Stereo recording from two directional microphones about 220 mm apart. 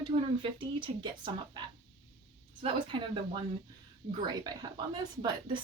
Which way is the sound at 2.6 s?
20° right (ahead or behind).